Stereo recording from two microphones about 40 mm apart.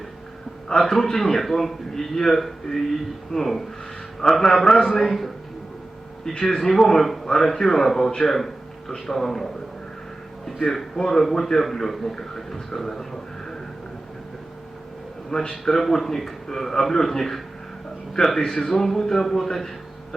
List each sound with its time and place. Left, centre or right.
0.7 s a man's voice: centre
6.3 s a man's voice: centre
6.6 s a man's voice: centre
15.3 s a man's voice: centre